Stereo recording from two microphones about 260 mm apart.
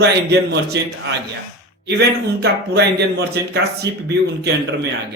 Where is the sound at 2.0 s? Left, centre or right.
Right.